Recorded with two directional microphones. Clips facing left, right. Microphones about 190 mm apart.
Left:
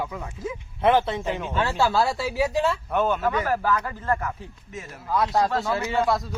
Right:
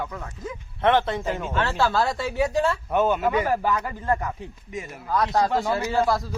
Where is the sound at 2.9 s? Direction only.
10° right (ahead or behind).